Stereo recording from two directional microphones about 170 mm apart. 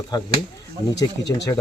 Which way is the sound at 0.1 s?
20° left (ahead or behind).